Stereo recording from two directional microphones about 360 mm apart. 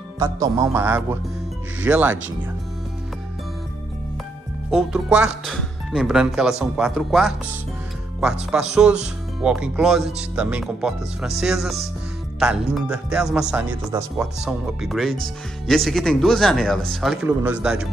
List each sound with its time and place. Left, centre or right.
0.2 s speech: centre
4.6 s speech: centre